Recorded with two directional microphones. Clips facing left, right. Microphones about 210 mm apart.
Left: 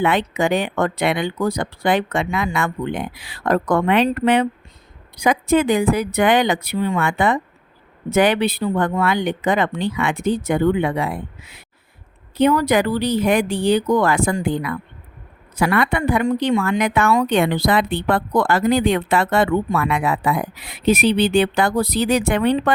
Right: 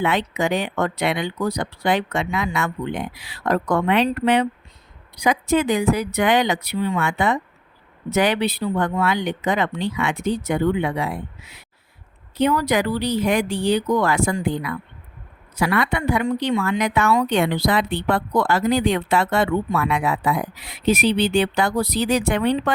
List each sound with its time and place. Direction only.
0.0 s a woman's voice: 55° left (ahead or behind)